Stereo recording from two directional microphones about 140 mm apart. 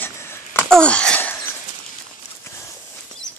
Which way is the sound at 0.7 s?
5° left (ahead or behind).